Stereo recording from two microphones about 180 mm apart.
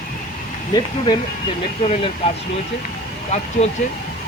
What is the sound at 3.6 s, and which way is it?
Speech, 40° left (ahead or behind).